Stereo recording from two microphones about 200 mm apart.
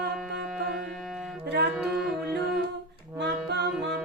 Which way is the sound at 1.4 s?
55° right (ahead or behind).